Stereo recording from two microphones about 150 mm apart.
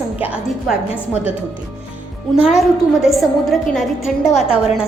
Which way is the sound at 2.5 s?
Centre (ahead or behind).